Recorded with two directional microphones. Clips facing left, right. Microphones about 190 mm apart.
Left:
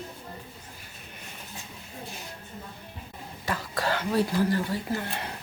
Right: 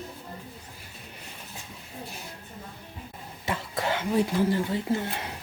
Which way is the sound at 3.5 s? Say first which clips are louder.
Even; 25° right (ahead or behind).